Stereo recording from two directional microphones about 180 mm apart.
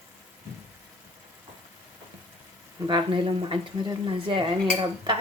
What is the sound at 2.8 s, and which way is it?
Speech, 25° right (ahead or behind).